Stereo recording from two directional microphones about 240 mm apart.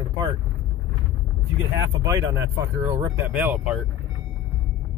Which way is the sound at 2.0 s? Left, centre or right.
Centre.